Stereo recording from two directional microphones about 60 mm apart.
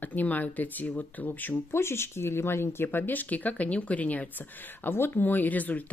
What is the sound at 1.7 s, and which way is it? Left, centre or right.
Speech, left.